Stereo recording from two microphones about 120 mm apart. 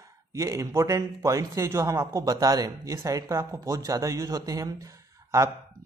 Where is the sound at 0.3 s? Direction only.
25° right (ahead or behind).